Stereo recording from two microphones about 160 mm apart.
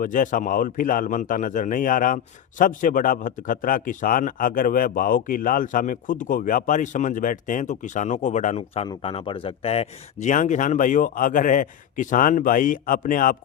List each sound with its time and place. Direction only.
0.0 s a man's voice: 55° left (ahead or behind)